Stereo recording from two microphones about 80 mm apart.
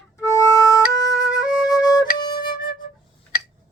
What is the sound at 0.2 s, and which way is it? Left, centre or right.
Flute, left.